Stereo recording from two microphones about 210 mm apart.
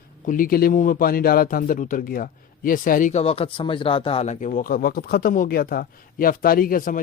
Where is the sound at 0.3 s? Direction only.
40° left (ahead or behind).